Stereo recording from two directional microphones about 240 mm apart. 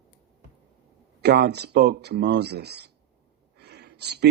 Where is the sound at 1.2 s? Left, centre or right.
Right.